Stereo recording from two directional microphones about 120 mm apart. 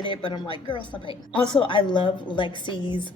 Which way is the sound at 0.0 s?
40° left (ahead or behind).